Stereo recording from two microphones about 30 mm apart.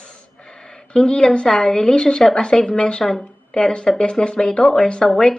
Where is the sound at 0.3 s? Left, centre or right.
Left.